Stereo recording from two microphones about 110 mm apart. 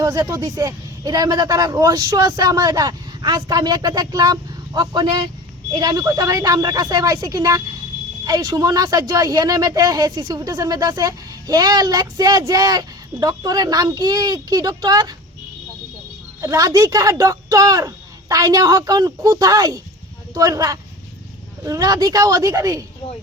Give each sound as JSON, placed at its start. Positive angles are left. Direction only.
{"t": 0.0, "sound": "speech", "side_deg": -30}
{"t": 16.4, "sound": "speech", "side_deg": -30}